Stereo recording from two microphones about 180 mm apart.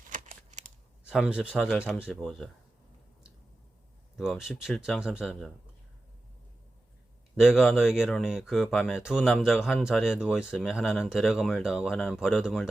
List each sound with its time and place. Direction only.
0.1 s a sound: 40° right (ahead or behind)
1.0 s speech: 5° right (ahead or behind)
4.2 s speech: centre (ahead or behind)
7.3 s speech: centre (ahead or behind)